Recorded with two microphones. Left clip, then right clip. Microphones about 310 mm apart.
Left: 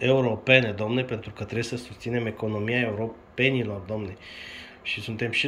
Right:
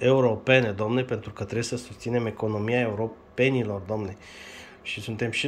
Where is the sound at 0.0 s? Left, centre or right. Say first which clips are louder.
Right 2 dB; centre.